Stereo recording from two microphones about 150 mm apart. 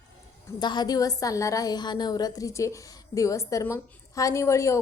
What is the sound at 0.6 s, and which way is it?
A woman's voice, 30° left (ahead or behind).